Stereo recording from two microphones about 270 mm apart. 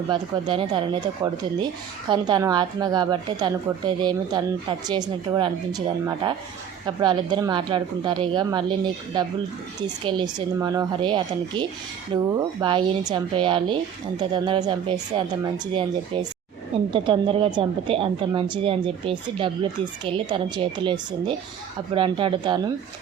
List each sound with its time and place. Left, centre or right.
0.1 s a woman's voice: centre
9.8 s a woman's voice: centre